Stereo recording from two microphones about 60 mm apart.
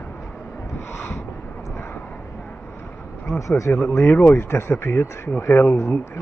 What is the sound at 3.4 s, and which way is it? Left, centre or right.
Speech, left.